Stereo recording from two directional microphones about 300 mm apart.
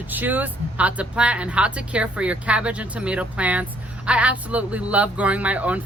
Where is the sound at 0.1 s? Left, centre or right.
Centre.